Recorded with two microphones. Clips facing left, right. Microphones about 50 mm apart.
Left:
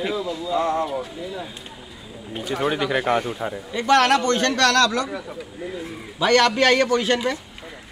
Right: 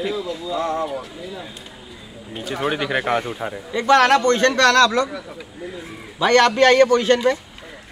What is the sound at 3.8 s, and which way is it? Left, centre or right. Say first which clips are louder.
A man's voice: right 3 dB; right.